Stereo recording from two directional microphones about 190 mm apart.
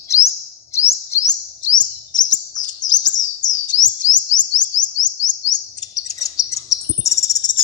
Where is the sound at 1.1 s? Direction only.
20° left (ahead or behind).